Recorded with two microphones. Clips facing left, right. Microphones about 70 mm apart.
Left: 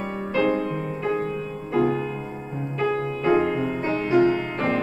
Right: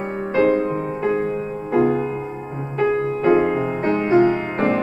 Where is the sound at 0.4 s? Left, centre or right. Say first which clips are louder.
Right 5 dB; right.